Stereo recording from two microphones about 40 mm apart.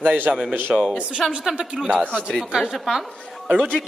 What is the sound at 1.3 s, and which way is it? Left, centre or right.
Speech, right.